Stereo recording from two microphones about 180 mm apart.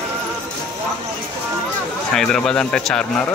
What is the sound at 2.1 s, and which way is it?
Speech, 5° left (ahead or behind).